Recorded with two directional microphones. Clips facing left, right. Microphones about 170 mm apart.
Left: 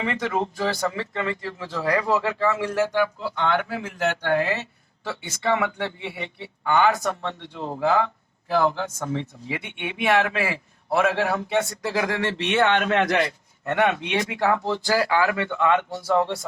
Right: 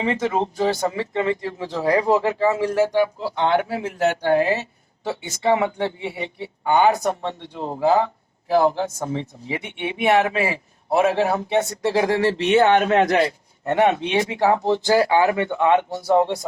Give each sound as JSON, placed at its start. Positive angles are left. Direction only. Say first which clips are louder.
{"t": 0.0, "sound": "speech", "louder": "right 4 dB", "side_deg": -25}
{"t": 5.0, "sound": "speech", "louder": "right 5 dB", "side_deg": -20}
{"t": 7.5, "sound": "speech", "louder": "right 3 dB", "side_deg": -40}
{"t": 9.1, "sound": "speech", "louder": "right 2 dB", "side_deg": -20}